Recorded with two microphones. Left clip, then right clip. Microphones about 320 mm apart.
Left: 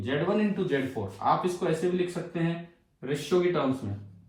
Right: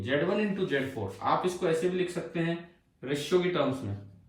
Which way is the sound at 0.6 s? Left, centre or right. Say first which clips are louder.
Left 1 dB; centre.